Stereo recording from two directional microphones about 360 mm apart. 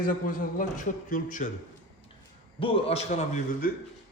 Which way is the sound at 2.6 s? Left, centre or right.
Centre.